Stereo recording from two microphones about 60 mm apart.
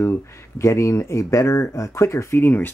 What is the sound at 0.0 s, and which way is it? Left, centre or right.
Speech, left.